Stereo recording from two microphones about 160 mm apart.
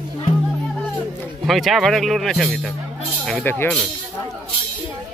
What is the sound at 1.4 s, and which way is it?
Speech, centre (ahead or behind).